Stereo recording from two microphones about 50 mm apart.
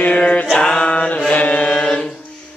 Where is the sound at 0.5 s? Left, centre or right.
Centre.